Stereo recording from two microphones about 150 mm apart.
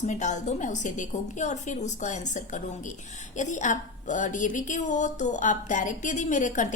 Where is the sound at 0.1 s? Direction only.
55° left (ahead or behind).